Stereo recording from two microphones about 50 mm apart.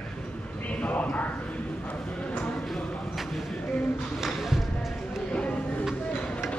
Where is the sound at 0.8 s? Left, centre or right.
Left.